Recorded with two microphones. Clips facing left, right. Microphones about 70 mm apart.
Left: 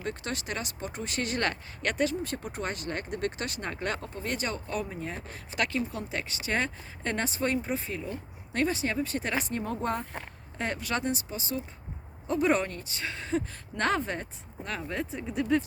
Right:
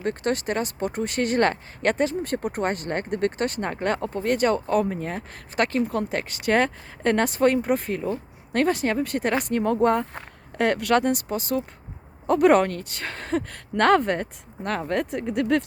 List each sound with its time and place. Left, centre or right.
0.0 s speech: right
10.6 s speech: right
12.3 s speech: right